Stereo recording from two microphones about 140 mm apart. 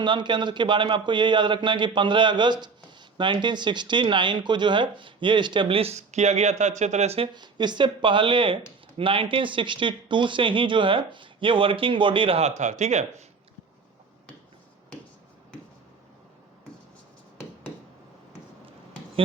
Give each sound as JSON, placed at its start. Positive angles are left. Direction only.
{"t": 0.0, "sound": "speech", "side_deg": -35}
{"t": 7.3, "sound": "speech", "side_deg": -30}